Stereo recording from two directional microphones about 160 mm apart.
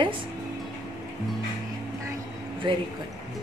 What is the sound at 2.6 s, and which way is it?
Speech, 30° right (ahead or behind).